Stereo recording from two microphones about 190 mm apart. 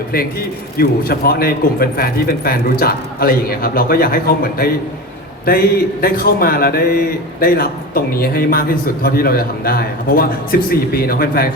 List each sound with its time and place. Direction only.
0.8 s speech: 50° left (ahead or behind)